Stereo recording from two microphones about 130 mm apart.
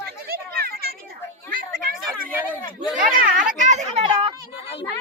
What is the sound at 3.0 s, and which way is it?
A child's voice, 90° right.